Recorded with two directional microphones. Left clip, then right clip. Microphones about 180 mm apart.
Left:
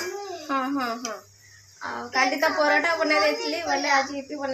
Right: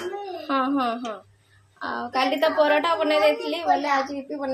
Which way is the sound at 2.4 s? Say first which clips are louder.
Right 4 dB; 10° right (ahead or behind).